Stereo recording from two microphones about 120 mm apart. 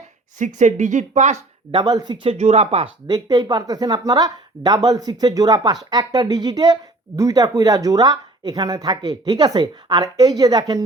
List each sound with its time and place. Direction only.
0.3 s speech: 90° right
1.7 s speech: 35° right (ahead or behind)
2.2 s speech: 60° right (ahead or behind)
3.1 s speech: 35° right (ahead or behind)